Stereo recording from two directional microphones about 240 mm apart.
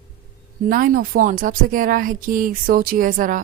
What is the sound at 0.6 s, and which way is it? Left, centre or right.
A woman's voice, right.